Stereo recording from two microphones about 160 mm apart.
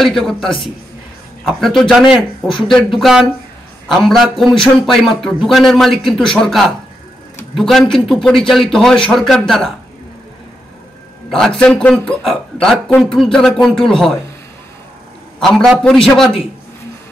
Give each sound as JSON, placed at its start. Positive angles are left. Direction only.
{"t": 0.0, "sound": "a man's voice", "side_deg": 0}
{"t": 11.2, "sound": "a man's voice", "side_deg": 5}
{"t": 15.4, "sound": "a man's voice", "side_deg": 0}